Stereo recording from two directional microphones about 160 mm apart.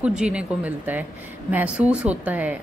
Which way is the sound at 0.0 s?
5° right (ahead or behind).